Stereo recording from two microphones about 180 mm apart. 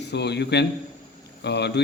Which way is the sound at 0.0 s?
70° left (ahead or behind).